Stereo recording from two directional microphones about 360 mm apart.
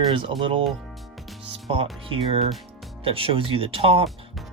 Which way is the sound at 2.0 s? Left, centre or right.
Centre.